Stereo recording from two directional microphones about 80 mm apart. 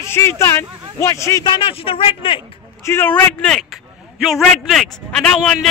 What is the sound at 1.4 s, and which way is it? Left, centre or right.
Speech, left.